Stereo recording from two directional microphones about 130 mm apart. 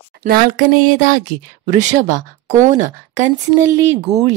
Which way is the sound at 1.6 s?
65° right (ahead or behind).